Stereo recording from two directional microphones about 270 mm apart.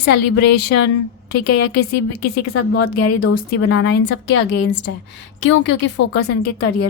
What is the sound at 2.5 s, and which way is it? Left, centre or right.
A woman's voice, left.